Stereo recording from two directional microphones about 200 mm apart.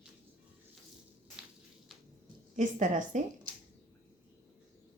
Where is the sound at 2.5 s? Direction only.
40° right (ahead or behind).